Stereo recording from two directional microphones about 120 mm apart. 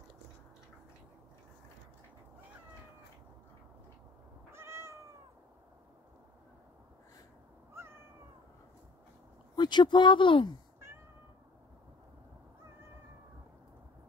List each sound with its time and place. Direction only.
4.5 s cat: 20° right (ahead or behind)
7.7 s cat: 20° right (ahead or behind)
9.6 s speech: 40° left (ahead or behind)